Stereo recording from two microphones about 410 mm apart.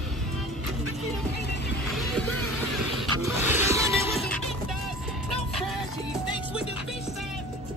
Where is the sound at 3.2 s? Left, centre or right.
Centre.